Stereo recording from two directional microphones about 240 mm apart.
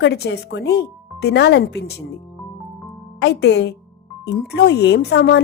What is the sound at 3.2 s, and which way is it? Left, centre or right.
Speech, left.